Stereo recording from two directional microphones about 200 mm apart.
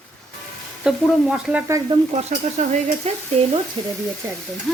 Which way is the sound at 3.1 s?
30° right (ahead or behind).